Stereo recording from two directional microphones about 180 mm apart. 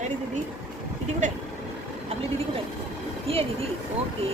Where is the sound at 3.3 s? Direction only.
30° right (ahead or behind).